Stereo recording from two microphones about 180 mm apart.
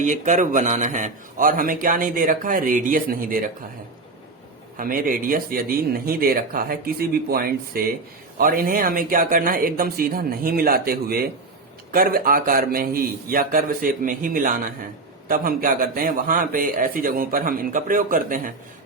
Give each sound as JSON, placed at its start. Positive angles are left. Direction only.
{"t": 0.0, "sound": "a man's voice", "side_deg": -45}
{"t": 4.8, "sound": "a man's voice", "side_deg": -50}